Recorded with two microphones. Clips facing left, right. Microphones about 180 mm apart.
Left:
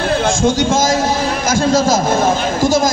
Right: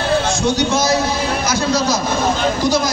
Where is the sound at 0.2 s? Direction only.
50° left (ahead or behind).